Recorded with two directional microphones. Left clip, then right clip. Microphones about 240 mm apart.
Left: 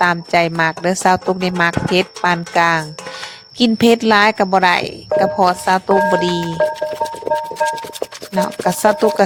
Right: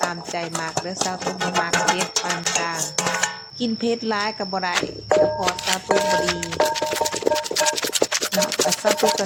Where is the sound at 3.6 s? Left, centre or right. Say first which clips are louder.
Left 11 dB; left.